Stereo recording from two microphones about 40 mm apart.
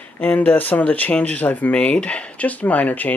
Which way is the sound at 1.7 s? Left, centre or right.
Left.